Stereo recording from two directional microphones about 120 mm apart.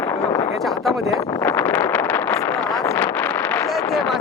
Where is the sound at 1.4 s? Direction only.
20° left (ahead or behind).